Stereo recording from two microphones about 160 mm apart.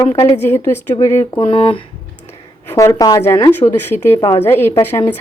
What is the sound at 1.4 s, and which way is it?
Speech, 35° left (ahead or behind).